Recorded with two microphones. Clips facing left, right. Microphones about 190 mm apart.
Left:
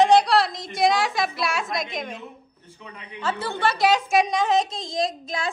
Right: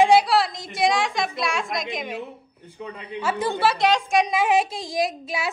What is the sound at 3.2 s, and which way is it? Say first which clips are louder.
Speech: right 3 dB; 10° right (ahead or behind).